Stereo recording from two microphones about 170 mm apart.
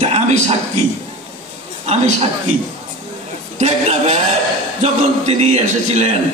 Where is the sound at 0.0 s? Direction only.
40° right (ahead or behind).